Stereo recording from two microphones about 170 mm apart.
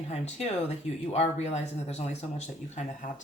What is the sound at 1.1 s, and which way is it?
Speech, 40° left (ahead or behind).